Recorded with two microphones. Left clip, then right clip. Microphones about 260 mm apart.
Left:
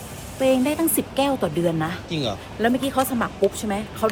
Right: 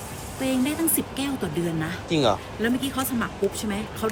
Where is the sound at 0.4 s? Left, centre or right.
Centre.